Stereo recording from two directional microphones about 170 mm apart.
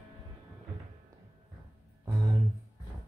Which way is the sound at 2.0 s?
20° right (ahead or behind).